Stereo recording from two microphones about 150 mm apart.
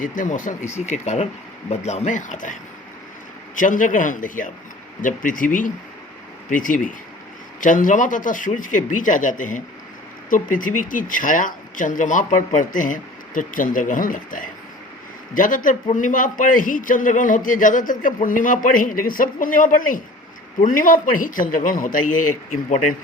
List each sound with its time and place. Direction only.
0.0 s a man's voice: 60° left (ahead or behind)
3.6 s a man's voice: 60° left (ahead or behind)